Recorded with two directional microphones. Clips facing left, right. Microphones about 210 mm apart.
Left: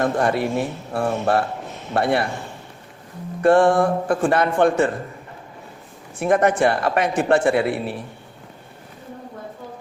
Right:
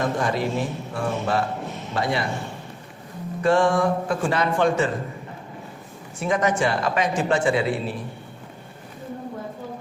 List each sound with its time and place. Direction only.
0.0 s a man's voice: 60° left (ahead or behind)
3.4 s a man's voice: 55° left (ahead or behind)
6.1 s a man's voice: 55° left (ahead or behind)